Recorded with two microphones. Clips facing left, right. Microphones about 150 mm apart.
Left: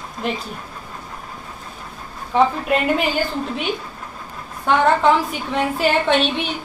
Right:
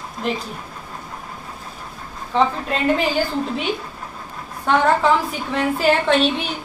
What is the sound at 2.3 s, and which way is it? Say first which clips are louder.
Speech: left 2 dB; 10° left (ahead or behind).